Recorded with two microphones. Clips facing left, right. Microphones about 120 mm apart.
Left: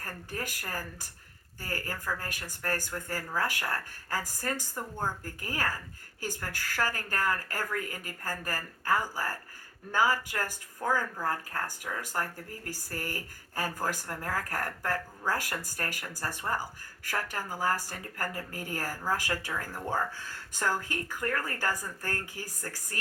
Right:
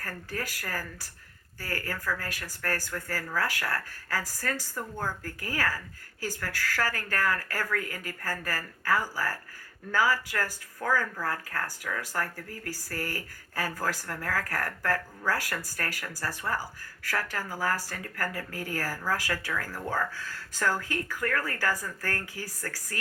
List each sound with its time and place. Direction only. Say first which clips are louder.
0.0 s speech: right 2 dB; 15° left (ahead or behind)